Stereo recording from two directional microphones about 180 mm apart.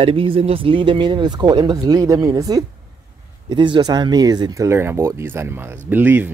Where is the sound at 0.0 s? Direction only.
30° right (ahead or behind).